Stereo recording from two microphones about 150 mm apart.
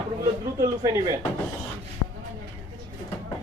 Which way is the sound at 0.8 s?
25° right (ahead or behind).